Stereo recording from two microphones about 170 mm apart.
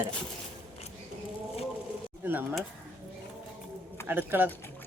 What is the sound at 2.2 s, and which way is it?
Speech, 10° right (ahead or behind).